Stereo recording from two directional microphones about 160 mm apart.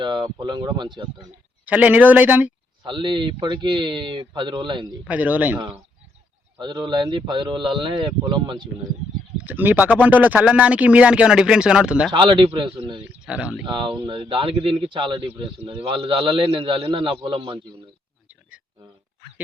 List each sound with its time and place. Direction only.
0.0 s speech: 25° right (ahead or behind)
1.6 s speech: 10° right (ahead or behind)
2.8 s speech: 30° right (ahead or behind)
5.0 s speech: 10° right (ahead or behind)
6.6 s speech: 25° right (ahead or behind)
9.4 s speech: 10° right (ahead or behind)
12.1 s a man's voice: 30° right (ahead or behind)
13.2 s speech: 5° right (ahead or behind)
13.7 s a man's voice: 30° right (ahead or behind)